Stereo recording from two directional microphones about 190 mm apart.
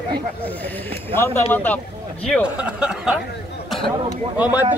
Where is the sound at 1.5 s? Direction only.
10° left (ahead or behind).